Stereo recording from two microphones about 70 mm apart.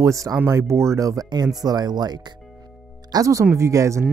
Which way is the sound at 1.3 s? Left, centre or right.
Right.